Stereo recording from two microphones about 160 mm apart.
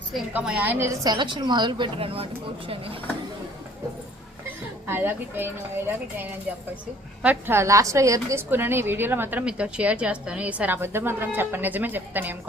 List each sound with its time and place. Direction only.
0.3 s a woman's voice: 10° right (ahead or behind)
1.1 s speech: 30° right (ahead or behind)
4.9 s a woman's voice: 15° right (ahead or behind)